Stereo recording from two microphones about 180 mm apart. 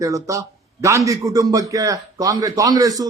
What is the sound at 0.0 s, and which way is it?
A man's voice, 15° right (ahead or behind).